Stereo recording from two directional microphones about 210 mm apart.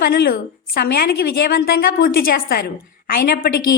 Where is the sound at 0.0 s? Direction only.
50° left (ahead or behind).